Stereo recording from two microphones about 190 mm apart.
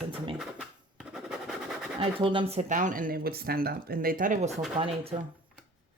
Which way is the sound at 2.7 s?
40° right (ahead or behind).